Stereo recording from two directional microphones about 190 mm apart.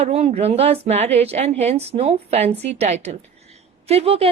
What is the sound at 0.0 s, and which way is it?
Speech, 35° right (ahead or behind).